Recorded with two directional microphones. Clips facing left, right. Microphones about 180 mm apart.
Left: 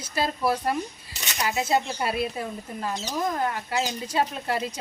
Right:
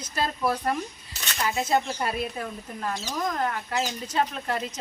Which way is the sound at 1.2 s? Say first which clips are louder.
Even; 15° left (ahead or behind).